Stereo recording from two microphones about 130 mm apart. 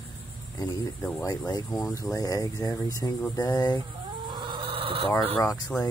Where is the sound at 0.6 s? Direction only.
30° left (ahead or behind).